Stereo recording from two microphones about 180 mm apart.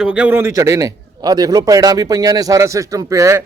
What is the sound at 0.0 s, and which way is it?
A man's voice, 5° right (ahead or behind).